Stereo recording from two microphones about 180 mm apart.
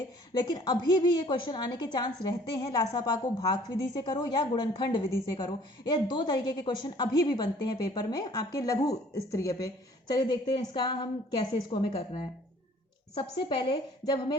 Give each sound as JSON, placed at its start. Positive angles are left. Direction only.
{"t": 0.3, "sound": "a woman's voice", "side_deg": 25}